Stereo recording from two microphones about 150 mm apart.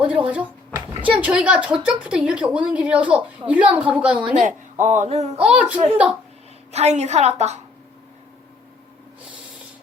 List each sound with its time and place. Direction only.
0.3 s a woman's voice: 10° right (ahead or behind)
4.4 s speech: 55° right (ahead or behind)
5.4 s a woman's voice: 10° right (ahead or behind)
6.7 s speech: 50° right (ahead or behind)